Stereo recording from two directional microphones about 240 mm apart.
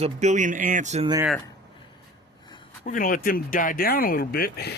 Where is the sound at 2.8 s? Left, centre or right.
Left.